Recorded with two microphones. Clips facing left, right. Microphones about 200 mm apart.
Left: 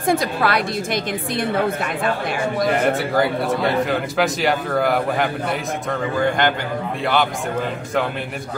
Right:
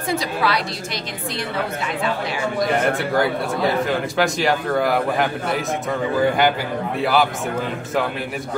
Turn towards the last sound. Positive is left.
turn(degrees=-5)  # may be behind; listen again after turning